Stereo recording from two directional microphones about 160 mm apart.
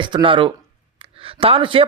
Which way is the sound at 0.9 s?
35° right (ahead or behind).